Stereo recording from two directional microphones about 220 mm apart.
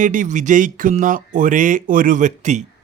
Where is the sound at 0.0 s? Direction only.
35° right (ahead or behind).